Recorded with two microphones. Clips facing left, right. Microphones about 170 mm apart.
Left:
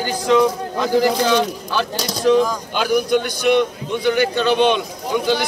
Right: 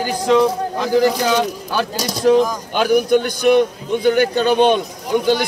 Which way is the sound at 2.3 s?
50° right (ahead or behind).